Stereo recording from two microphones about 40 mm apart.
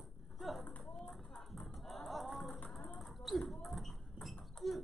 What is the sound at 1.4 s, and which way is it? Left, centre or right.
Music, centre.